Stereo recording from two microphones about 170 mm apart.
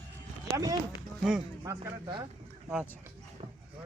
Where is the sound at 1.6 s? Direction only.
20° right (ahead or behind).